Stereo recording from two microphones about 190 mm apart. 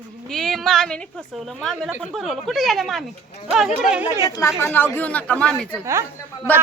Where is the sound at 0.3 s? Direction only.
Centre (ahead or behind).